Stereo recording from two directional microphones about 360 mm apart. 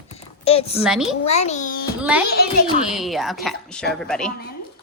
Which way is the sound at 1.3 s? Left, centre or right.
Centre.